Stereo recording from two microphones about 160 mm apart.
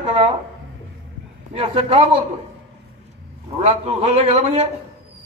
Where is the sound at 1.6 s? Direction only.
40° right (ahead or behind).